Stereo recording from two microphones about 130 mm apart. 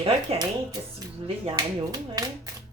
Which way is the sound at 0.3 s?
50° right (ahead or behind).